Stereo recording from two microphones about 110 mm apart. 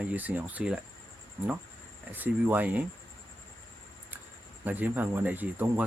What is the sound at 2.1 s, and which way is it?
Speech, 15° right (ahead or behind).